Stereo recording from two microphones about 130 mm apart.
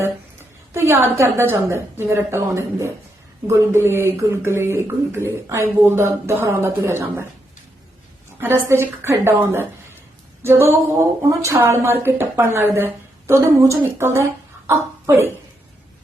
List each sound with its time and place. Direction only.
0.7 s speech: 20° right (ahead or behind)
8.4 s a woman's voice: 20° right (ahead or behind)